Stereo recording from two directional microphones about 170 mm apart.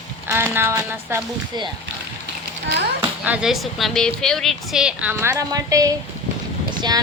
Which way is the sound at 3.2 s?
5° right (ahead or behind).